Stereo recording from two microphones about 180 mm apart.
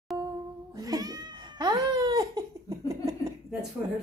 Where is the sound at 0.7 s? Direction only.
20° right (ahead or behind).